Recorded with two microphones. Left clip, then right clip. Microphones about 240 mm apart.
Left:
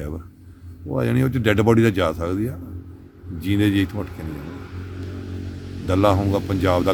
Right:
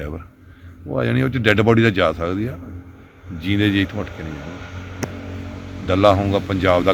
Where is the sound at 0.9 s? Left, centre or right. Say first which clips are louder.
Right 2 dB; centre.